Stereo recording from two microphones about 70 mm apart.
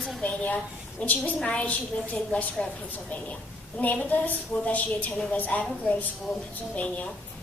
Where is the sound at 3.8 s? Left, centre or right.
Left.